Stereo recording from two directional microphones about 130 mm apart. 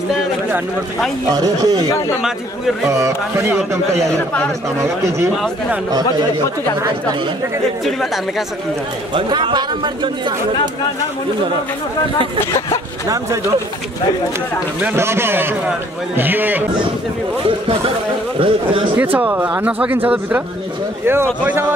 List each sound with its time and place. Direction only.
1.3 s speech: 30° right (ahead or behind)
2.9 s speech: 25° right (ahead or behind)
7.8 s speech: centre (ahead or behind)
9.1 s speech: 35° right (ahead or behind)
14.8 s speech: 15° right (ahead or behind)
17.5 s speech: 45° right (ahead or behind)
19.1 s speech: 10° right (ahead or behind)